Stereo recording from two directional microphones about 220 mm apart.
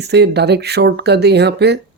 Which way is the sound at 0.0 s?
50° right (ahead or behind).